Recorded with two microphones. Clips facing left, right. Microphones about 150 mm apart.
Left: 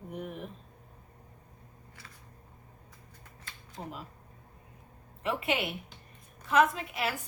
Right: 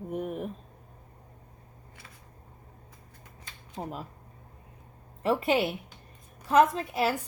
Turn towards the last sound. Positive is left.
turn(degrees=-35)  # may be behind; listen again after turning